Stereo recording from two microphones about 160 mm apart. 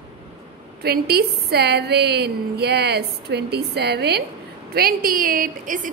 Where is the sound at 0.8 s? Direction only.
80° right.